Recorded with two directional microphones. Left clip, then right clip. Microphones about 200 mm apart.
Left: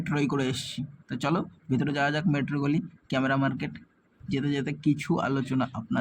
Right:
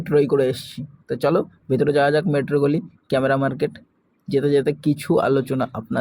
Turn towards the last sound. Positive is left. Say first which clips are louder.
# right 6 dB
turn(degrees=-15)  # may be behind; listen again after turning